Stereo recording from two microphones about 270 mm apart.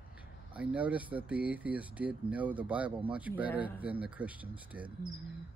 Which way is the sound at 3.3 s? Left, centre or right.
Centre.